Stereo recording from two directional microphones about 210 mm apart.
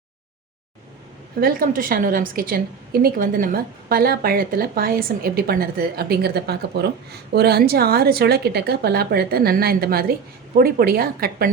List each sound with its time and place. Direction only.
1.4 s a woman's voice: 45° right (ahead or behind)